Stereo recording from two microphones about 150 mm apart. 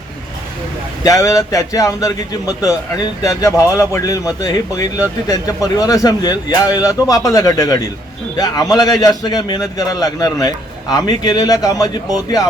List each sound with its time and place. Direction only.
1.0 s a man's voice: 20° left (ahead or behind)